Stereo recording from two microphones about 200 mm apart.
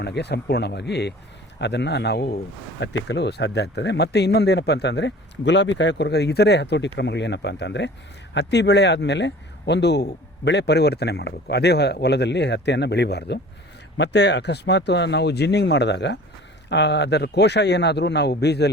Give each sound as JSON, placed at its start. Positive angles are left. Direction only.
{"t": 0.0, "sound": "speech", "side_deg": 55}